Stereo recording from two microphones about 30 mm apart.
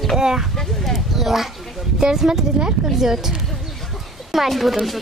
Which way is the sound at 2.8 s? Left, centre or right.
Centre.